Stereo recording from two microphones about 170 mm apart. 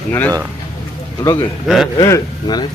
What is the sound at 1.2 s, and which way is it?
Speech, 20° left (ahead or behind).